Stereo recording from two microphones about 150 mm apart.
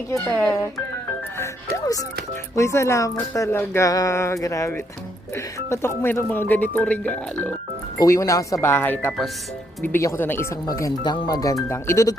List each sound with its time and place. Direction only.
0.3 s speech: 5° left (ahead or behind)
1.7 s speech: 25° left (ahead or behind)